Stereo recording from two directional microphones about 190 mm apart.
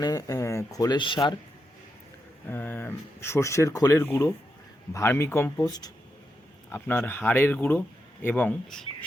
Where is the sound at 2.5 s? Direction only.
10° left (ahead or behind).